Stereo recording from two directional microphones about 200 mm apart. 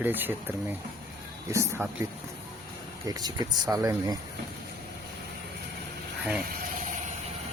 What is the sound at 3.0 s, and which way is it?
Speech, 20° right (ahead or behind).